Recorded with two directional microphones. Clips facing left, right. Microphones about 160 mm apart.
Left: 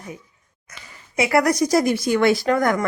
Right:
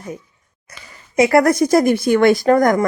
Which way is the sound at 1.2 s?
45° right (ahead or behind).